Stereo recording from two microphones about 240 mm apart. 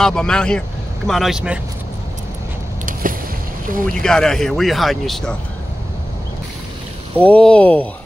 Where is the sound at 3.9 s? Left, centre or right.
Centre.